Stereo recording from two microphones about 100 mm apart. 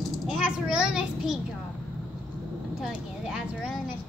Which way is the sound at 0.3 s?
10° right (ahead or behind).